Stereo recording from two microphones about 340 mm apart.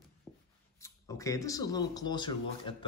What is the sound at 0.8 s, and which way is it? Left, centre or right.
Speech, centre.